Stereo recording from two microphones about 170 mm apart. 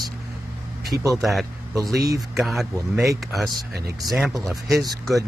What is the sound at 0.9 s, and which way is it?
Speech, centre (ahead or behind).